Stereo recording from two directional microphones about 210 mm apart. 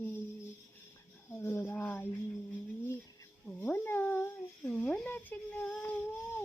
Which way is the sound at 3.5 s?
5° left (ahead or behind).